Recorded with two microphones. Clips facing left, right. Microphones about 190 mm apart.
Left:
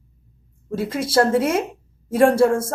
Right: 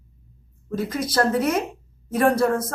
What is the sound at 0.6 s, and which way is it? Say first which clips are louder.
A woman's voice: left 2 dB; 30° left (ahead or behind).